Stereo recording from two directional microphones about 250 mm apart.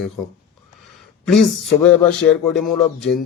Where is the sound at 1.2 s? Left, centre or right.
Centre.